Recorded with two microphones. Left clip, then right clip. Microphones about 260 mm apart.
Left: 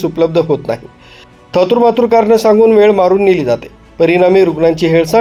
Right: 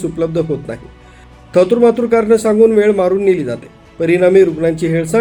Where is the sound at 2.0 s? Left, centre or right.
Left.